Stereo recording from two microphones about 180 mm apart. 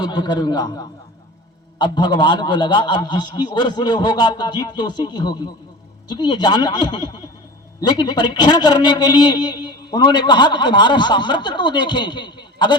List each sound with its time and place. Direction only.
0.0 s a man's voice: 25° left (ahead or behind)